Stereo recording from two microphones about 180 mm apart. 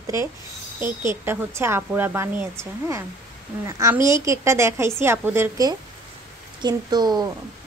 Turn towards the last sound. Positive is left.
turn(degrees=-20)  # may be behind; listen again after turning